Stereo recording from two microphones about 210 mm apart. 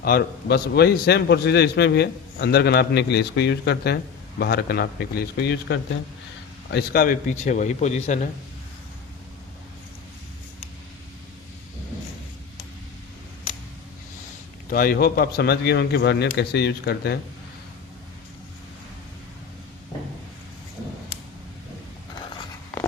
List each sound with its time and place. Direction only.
0.0 s a man's voice: 45° left (ahead or behind)
14.7 s a man's voice: 45° left (ahead or behind)